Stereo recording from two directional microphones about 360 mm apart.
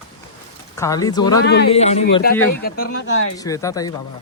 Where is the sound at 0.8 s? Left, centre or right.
Centre; by 2.9 s left.